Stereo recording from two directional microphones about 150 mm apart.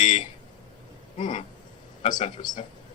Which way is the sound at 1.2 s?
50° left (ahead or behind).